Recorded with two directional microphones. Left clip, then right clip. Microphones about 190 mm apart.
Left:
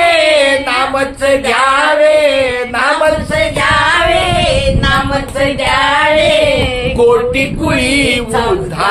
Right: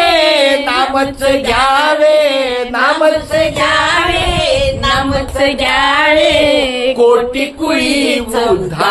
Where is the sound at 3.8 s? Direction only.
40° right (ahead or behind).